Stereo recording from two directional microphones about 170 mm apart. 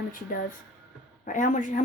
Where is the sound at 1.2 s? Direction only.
50° left (ahead or behind).